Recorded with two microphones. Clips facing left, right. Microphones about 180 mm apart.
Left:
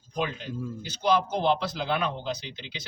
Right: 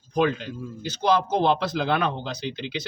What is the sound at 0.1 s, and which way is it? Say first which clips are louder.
A man's voice: right 8 dB; 65° right (ahead or behind).